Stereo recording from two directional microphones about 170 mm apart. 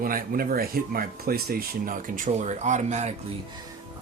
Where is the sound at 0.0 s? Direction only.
60° right (ahead or behind).